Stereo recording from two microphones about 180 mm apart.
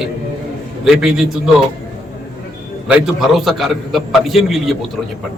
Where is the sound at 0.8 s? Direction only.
Centre (ahead or behind).